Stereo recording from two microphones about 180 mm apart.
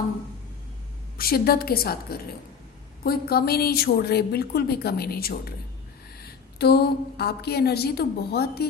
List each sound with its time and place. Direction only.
1.2 s a woman's voice: 60° left (ahead or behind)
6.6 s a woman's voice: 65° left (ahead or behind)